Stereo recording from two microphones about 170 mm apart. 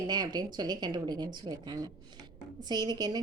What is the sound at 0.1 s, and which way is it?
A woman's voice, 25° right (ahead or behind).